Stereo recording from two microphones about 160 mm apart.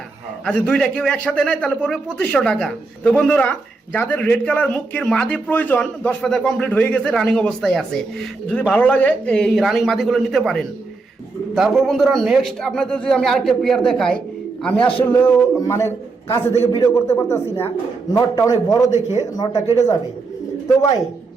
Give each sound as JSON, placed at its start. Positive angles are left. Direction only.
{"t": 0.4, "sound": "a man's voice", "side_deg": 5}
{"t": 14.8, "sound": "a man's voice", "side_deg": 35}
{"t": 15.0, "sound": "a man's voice", "side_deg": 15}
{"t": 18.9, "sound": "speech", "side_deg": 45}
{"t": 19.2, "sound": "speech", "side_deg": 20}